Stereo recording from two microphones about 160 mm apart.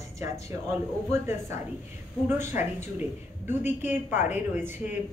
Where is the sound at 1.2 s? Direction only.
15° right (ahead or behind).